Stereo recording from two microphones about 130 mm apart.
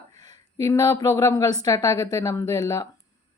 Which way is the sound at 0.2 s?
30° left (ahead or behind).